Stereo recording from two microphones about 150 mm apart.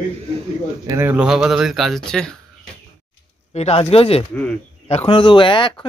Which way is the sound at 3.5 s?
45° left (ahead or behind).